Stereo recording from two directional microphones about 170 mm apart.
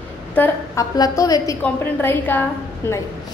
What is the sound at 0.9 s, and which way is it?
A woman's voice, 20° left (ahead or behind).